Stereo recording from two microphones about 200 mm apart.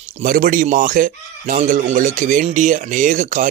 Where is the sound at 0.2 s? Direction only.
40° right (ahead or behind).